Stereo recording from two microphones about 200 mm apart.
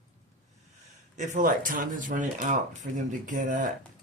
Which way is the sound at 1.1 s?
40° right (ahead or behind).